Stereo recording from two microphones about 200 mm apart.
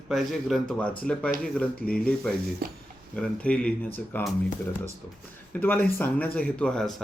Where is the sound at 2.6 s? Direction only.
50° right (ahead or behind).